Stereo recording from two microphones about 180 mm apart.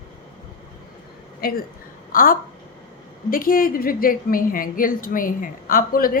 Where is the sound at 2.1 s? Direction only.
50° left (ahead or behind).